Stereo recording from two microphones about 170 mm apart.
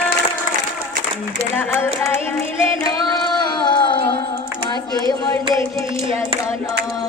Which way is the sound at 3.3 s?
25° left (ahead or behind).